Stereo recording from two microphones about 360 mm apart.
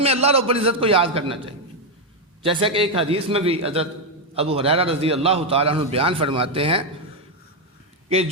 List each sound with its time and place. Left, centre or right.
0.0 s a man's voice: centre